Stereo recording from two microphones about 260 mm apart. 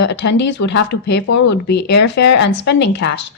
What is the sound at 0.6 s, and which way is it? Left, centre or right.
Speech, left.